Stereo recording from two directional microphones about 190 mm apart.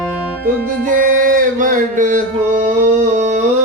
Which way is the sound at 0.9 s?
45° right (ahead or behind).